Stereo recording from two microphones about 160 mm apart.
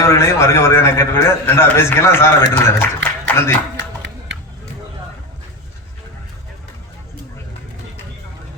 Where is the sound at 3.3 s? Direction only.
15° left (ahead or behind).